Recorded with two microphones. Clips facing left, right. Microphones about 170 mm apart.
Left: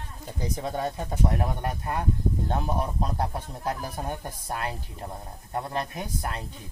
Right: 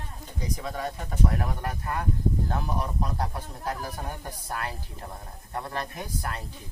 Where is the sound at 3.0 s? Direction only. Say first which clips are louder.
Left 2 dB; 25° left (ahead or behind).